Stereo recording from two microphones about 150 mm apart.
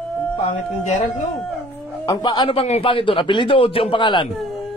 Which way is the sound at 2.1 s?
30° left (ahead or behind).